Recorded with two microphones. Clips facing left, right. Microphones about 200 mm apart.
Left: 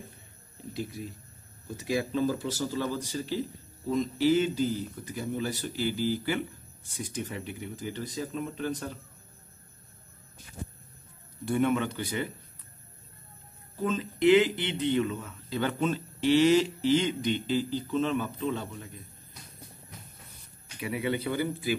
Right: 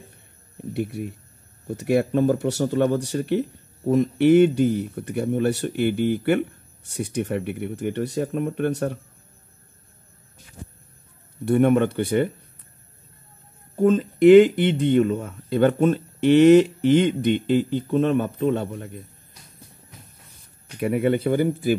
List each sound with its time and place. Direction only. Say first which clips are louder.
0.6 s speech: right 9 dB; 70° right (ahead or behind)
11.4 s speech: right 9 dB; 60° right (ahead or behind)
13.7 s speech: right 11 dB; 50° right (ahead or behind)
20.6 s speech: right 10 dB; 50° right (ahead or behind)